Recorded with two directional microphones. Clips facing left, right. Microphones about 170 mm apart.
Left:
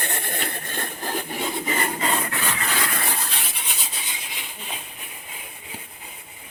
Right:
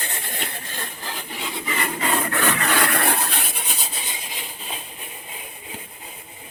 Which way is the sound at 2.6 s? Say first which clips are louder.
Right 6 dB; 65° right (ahead or behind).